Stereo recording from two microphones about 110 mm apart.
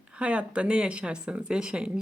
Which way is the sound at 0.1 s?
10° right (ahead or behind).